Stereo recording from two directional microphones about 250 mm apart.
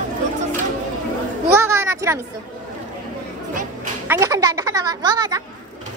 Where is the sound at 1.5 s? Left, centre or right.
Centre.